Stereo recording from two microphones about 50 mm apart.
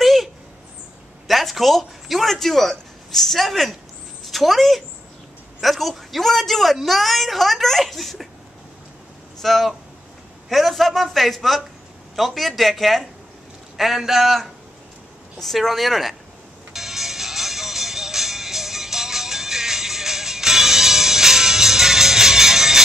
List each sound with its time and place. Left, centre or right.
0.0 s a sound: centre
1.2 s a man's voice: centre
9.4 s a man's voice: centre
16.7 s music: centre